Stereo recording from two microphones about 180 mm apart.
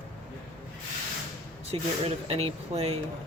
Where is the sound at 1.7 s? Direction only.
35° right (ahead or behind).